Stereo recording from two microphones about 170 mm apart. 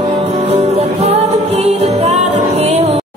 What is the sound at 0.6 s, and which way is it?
Music, 40° right (ahead or behind).